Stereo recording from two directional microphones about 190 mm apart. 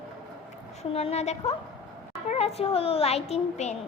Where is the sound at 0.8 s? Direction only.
35° left (ahead or behind).